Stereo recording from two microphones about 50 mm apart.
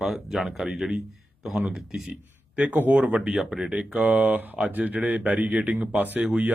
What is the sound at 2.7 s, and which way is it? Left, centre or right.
Speech, right.